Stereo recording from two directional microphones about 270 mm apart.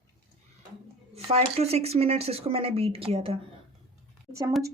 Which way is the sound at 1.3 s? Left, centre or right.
Right.